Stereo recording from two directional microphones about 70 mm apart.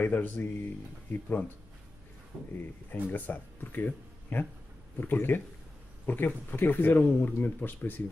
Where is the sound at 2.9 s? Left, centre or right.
Left.